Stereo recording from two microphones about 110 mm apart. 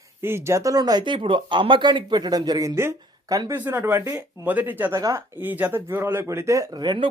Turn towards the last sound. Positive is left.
turn(degrees=-40)  # may be behind; listen again after turning